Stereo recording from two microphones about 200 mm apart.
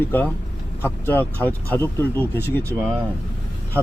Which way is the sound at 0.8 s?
10° left (ahead or behind).